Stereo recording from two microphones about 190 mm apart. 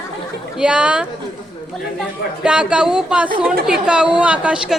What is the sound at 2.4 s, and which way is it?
A woman's voice, 5° right (ahead or behind).